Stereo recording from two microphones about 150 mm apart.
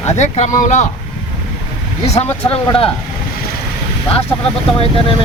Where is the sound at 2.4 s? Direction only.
40° left (ahead or behind).